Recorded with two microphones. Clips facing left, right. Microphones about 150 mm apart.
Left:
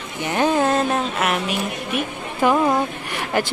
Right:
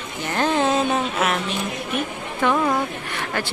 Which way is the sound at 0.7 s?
Centre (ahead or behind).